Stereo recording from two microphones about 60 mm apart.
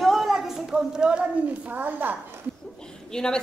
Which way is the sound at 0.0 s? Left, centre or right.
Centre.